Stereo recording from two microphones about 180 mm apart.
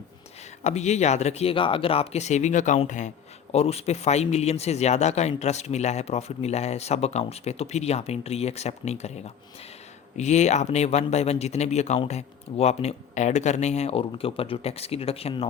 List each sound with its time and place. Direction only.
0.6 s a man's voice: 40° left (ahead or behind)